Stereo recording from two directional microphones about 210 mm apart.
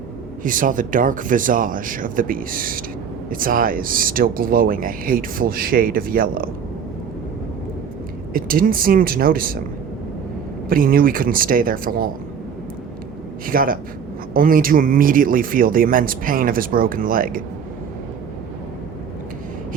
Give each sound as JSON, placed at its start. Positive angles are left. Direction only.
{"t": 0.4, "sound": "speech", "side_deg": -40}
{"t": 8.3, "sound": "speech", "side_deg": -40}
{"t": 10.7, "sound": "speech", "side_deg": -40}
{"t": 13.4, "sound": "speech", "side_deg": -40}